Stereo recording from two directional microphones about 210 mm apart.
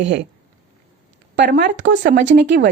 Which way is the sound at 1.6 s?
55° right (ahead or behind).